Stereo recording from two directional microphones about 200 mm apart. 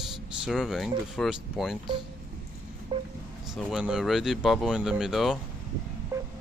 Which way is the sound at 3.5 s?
5° right (ahead or behind).